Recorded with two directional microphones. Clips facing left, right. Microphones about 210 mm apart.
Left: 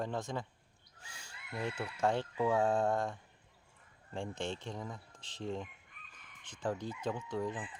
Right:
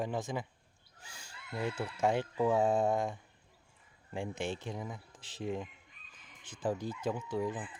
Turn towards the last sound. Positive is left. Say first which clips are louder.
# right 2 dB
turn(degrees=-5)  # may be behind; listen again after turning